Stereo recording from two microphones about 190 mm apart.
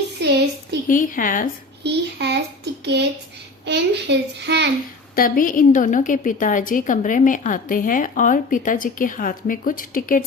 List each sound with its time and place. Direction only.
0.2 s a sound: 60° right (ahead or behind)
0.9 s a woman's voice: 45° left (ahead or behind)
1.8 s a child's voice: 60° right (ahead or behind)
5.1 s a woman's voice: 50° left (ahead or behind)